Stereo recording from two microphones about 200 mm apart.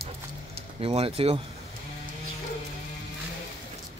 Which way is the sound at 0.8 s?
30° right (ahead or behind).